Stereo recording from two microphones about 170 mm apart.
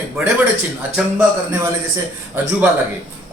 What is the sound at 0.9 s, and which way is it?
Speech, 10° right (ahead or behind).